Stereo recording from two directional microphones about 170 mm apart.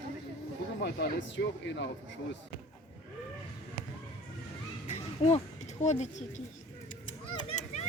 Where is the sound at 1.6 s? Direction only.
90° left.